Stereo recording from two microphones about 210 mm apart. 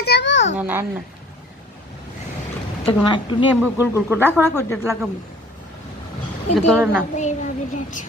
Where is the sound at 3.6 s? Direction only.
10° right (ahead or behind).